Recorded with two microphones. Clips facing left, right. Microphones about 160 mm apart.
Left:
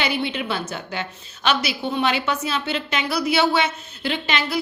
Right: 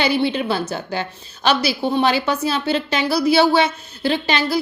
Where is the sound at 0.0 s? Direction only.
35° right (ahead or behind).